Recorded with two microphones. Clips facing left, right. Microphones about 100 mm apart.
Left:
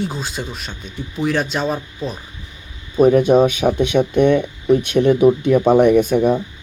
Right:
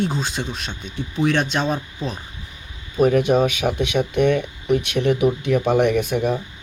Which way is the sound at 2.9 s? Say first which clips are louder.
Left 5 dB; 30° left (ahead or behind).